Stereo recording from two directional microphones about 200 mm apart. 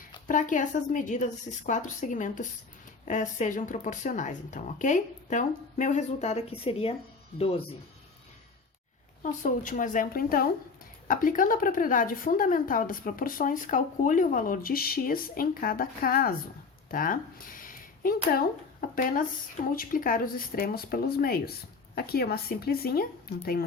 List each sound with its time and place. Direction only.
0.3 s speech: 40° left (ahead or behind)
9.2 s a woman's voice: 40° left (ahead or behind)